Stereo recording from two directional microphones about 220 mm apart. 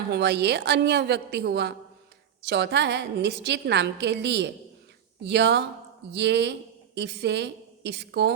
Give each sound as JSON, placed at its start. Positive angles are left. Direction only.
{"t": 0.1, "sound": "a woman's voice", "side_deg": -50}